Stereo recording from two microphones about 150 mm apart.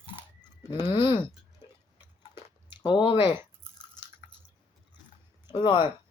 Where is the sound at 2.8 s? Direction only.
35° left (ahead or behind).